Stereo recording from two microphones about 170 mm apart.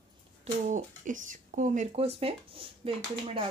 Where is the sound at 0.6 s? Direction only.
50° right (ahead or behind).